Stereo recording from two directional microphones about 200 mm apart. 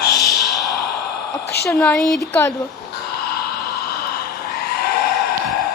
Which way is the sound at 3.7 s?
50° left (ahead or behind).